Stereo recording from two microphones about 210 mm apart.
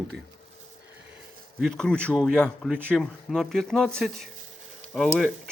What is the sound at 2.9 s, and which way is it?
Speech, 5° left (ahead or behind).